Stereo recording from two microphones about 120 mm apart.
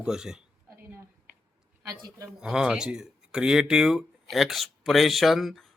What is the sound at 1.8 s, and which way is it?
Speech, 30° right (ahead or behind).